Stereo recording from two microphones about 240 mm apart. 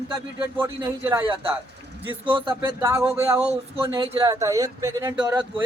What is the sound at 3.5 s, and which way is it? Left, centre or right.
Speech, centre.